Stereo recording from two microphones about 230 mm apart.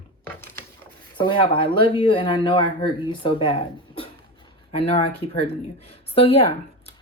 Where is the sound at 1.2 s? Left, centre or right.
Left.